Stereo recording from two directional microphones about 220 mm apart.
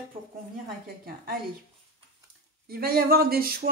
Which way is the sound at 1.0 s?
40° right (ahead or behind).